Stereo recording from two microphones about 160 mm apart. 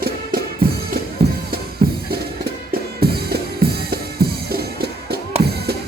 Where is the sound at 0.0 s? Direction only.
65° right (ahead or behind).